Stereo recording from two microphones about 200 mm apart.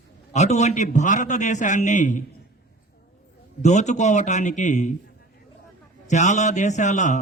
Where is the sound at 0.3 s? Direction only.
35° left (ahead or behind).